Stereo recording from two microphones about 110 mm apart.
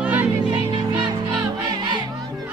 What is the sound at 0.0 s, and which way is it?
Music, 15° right (ahead or behind).